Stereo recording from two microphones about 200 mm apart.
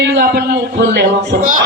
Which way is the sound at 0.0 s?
55° right (ahead or behind).